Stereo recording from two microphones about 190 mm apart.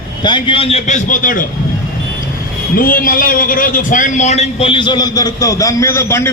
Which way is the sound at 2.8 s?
45° left (ahead or behind).